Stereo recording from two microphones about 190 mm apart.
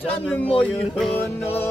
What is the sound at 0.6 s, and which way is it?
Music, 5° left (ahead or behind).